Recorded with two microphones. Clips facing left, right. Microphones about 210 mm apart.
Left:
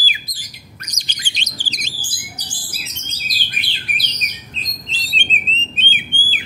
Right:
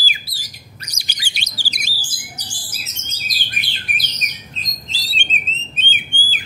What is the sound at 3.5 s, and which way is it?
Bird, 45° right (ahead or behind).